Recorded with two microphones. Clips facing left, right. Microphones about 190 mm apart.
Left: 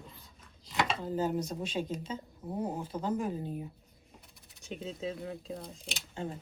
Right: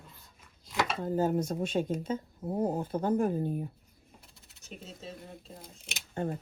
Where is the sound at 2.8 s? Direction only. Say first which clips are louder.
Right 5 dB; 55° right (ahead or behind).